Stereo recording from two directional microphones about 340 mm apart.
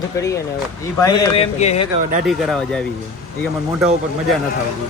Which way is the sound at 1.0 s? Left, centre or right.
Centre.